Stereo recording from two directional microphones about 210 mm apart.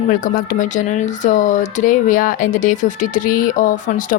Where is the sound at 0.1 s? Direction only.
40° left (ahead or behind).